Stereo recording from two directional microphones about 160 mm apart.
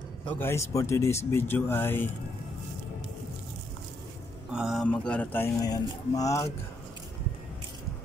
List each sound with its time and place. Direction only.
0.3 s speech: 15° left (ahead or behind)
4.5 s speech: 5° right (ahead or behind)
4.8 s speech: 10° left (ahead or behind)
5.6 s speech: 20° left (ahead or behind)